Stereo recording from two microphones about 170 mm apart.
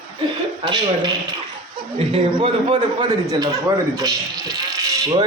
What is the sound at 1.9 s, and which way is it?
A man's voice, 35° right (ahead or behind).